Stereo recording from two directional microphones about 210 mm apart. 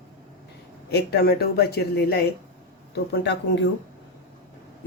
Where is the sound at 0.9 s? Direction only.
50° left (ahead or behind).